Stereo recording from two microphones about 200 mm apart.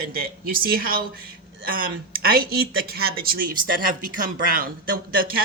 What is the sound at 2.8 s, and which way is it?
Speech, 50° right (ahead or behind).